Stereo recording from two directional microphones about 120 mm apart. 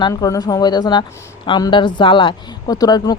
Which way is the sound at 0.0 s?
30° left (ahead or behind).